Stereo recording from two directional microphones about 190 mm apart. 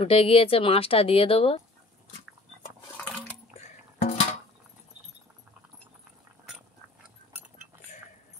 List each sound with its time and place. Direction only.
0.0 s speech: 30° left (ahead or behind)
3.6 s music: 35° left (ahead or behind)